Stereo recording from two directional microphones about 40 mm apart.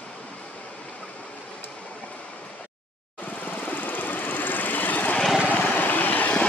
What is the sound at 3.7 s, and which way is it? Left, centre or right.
Vehicle, left.